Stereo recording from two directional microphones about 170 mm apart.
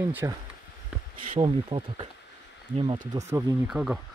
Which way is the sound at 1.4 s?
30° right (ahead or behind).